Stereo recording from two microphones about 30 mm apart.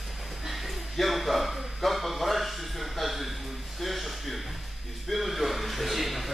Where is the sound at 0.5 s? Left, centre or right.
Centre.